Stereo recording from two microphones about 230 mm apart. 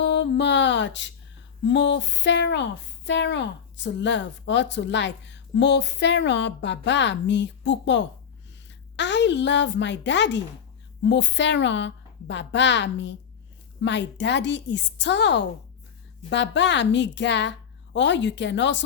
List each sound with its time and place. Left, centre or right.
0.0 s music: left
1.6 s speech: left